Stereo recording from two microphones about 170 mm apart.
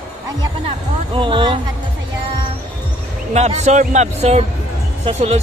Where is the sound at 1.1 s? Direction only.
30° right (ahead or behind).